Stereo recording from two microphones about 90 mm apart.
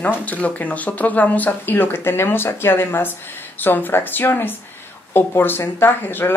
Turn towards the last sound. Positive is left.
turn(degrees=25)  # may be behind; listen again after turning